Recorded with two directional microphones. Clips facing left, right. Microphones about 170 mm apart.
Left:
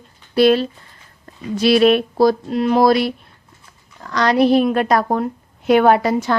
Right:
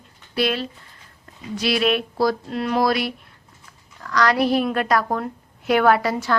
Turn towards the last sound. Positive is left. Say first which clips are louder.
# left 4 dB
turn(degrees=20)  # may be behind; listen again after turning